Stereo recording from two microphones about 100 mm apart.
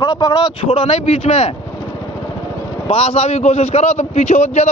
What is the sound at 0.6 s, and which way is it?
Speech, 75° left (ahead or behind).